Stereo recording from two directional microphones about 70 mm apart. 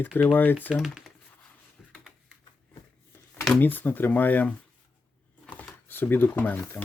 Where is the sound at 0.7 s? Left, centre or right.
Centre.